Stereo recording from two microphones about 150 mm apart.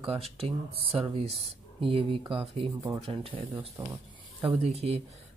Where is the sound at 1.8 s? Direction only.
35° right (ahead or behind).